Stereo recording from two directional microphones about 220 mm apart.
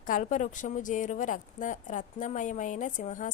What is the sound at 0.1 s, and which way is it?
A woman's voice, 35° left (ahead or behind).